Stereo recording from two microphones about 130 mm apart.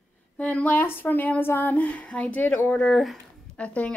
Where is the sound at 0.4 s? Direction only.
10° left (ahead or behind).